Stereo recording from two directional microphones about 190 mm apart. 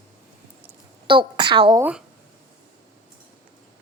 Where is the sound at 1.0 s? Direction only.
25° right (ahead or behind).